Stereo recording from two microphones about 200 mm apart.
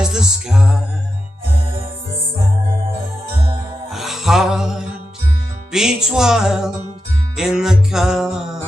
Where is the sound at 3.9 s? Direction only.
Centre (ahead or behind).